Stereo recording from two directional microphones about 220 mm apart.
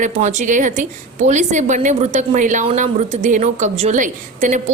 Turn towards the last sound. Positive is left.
turn(degrees=-35)  # may be behind; listen again after turning